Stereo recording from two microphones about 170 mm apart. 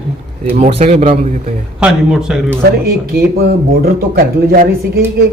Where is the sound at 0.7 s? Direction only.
40° right (ahead or behind).